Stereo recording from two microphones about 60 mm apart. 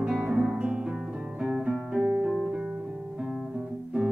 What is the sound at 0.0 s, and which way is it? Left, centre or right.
Music, centre.